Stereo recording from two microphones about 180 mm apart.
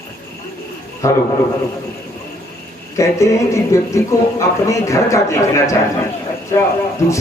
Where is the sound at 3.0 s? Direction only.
15° left (ahead or behind).